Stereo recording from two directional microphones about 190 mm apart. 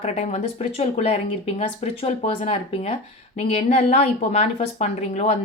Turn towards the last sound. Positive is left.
turn(degrees=35)  # may be behind; listen again after turning